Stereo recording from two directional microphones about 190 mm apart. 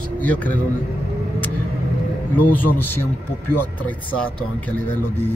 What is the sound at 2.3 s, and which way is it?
Speech, 10° left (ahead or behind).